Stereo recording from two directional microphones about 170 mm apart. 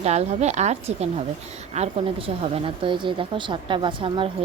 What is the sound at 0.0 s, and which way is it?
Speech, 40° right (ahead or behind).